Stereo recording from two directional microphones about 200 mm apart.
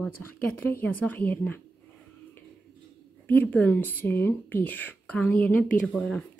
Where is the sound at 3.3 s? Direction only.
10° left (ahead or behind).